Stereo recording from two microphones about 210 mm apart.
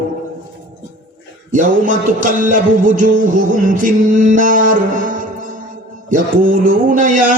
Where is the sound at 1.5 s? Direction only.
40° right (ahead or behind).